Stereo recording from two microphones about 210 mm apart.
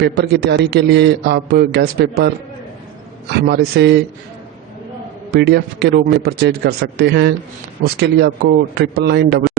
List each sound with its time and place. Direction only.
0.0 s a man's voice: 50° right (ahead or behind)
3.4 s a man's voice: 50° right (ahead or behind)
5.3 s a man's voice: 50° right (ahead or behind)